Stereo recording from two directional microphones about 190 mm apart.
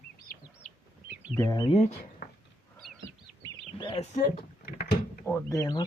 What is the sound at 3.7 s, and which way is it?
Speech, 25° left (ahead or behind).